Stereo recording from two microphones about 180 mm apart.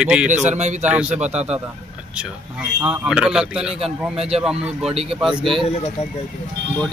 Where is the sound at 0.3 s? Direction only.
40° right (ahead or behind).